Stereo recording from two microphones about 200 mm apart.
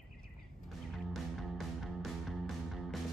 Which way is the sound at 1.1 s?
Centre (ahead or behind).